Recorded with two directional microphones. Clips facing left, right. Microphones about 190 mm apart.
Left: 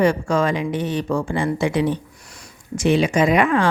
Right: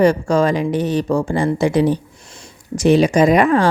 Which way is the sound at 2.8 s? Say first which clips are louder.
Right 5 dB; 40° right (ahead or behind).